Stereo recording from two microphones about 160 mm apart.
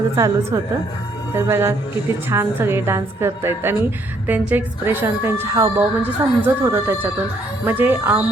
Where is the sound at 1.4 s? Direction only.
15° right (ahead or behind).